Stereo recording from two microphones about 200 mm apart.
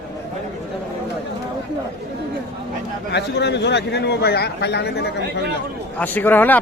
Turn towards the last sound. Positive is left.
turn(degrees=10)  # may be behind; listen again after turning